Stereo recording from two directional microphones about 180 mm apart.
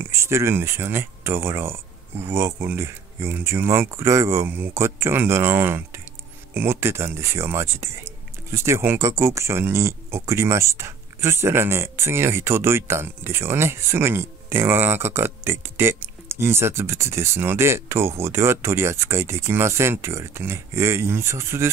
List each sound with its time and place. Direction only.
0.0 s speech: 15° right (ahead or behind)